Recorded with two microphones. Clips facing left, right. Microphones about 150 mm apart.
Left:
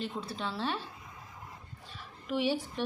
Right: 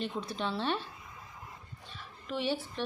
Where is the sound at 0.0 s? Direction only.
5° left (ahead or behind).